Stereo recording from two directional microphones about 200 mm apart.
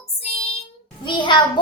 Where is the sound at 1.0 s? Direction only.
25° left (ahead or behind).